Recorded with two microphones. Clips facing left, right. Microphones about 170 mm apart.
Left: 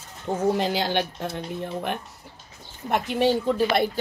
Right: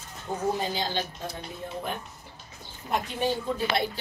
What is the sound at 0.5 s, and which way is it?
Speech, 80° left.